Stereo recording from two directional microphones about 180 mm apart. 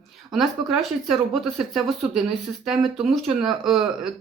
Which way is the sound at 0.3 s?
Centre (ahead or behind).